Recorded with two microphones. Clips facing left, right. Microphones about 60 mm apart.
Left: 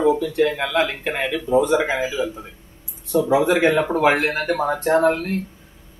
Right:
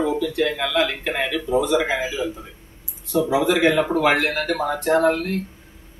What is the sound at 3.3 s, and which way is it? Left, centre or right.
A man's voice, left.